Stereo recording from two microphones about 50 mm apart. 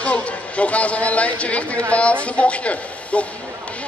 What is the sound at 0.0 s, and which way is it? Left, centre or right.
A man's voice, left.